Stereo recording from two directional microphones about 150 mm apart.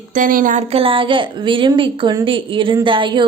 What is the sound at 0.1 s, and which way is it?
Speech, 65° right (ahead or behind).